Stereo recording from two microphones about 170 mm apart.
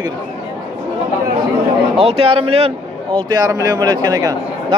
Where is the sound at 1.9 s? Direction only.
35° right (ahead or behind).